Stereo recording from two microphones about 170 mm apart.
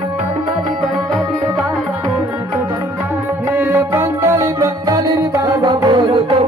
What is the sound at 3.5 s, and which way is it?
Music, 15° right (ahead or behind).